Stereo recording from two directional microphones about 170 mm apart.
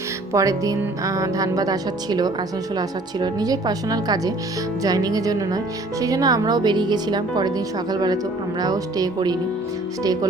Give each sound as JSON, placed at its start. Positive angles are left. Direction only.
{"t": 0.3, "sound": "speech", "side_deg": -20}